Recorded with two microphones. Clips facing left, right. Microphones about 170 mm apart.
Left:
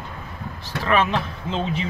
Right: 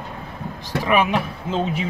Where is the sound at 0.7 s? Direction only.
15° right (ahead or behind).